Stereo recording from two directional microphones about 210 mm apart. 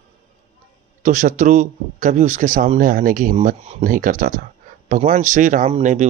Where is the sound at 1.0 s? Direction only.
35° right (ahead or behind).